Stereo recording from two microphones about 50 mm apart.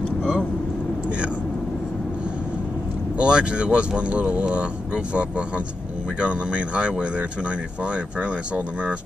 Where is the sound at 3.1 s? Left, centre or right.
Right.